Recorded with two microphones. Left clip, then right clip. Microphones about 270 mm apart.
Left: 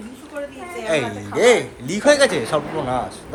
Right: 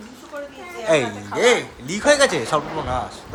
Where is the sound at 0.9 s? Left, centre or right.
Right.